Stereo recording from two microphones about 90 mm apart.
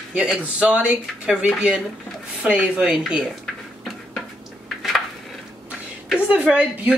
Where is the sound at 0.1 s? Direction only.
15° right (ahead or behind).